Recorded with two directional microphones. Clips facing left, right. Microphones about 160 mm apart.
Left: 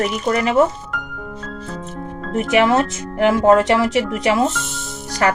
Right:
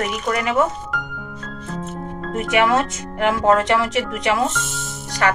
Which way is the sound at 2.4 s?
30° left (ahead or behind).